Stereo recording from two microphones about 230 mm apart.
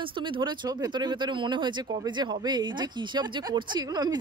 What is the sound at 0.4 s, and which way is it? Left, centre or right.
Speech, centre.